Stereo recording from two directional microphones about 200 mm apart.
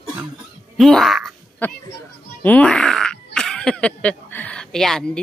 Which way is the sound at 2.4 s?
5° left (ahead or behind).